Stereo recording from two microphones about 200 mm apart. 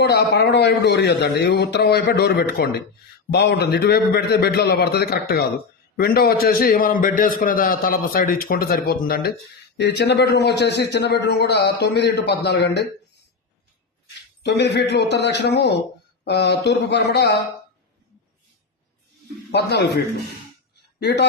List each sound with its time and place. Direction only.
0.0 s a man's voice: 60° left (ahead or behind)
14.4 s a man's voice: 55° left (ahead or behind)
19.5 s a man's voice: 55° left (ahead or behind)
21.0 s a man's voice: 55° left (ahead or behind)